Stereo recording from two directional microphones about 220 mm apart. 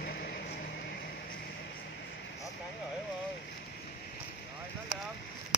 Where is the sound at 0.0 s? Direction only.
45° left (ahead or behind).